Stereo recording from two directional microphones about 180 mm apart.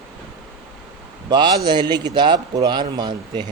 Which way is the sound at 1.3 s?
25° right (ahead or behind).